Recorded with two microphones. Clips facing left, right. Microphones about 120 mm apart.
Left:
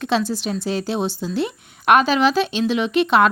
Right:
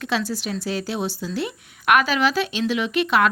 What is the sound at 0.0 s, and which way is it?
Speech, 25° left (ahead or behind).